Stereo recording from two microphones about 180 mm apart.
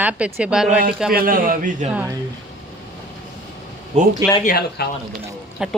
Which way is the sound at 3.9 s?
35° right (ahead or behind).